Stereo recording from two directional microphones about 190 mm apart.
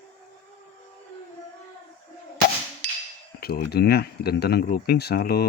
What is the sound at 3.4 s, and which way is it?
Speech, 55° left (ahead or behind).